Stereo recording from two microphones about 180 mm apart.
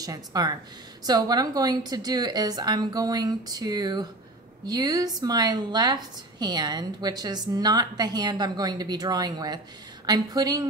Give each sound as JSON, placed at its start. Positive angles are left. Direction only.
{"t": 0.0, "sound": "a woman's voice", "side_deg": -20}